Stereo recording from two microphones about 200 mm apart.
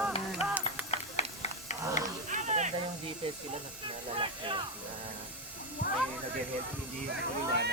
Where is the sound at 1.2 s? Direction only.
35° left (ahead or behind).